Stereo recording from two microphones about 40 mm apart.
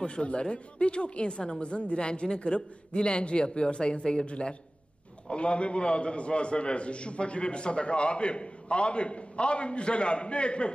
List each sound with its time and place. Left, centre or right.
0.0 s a man's voice: left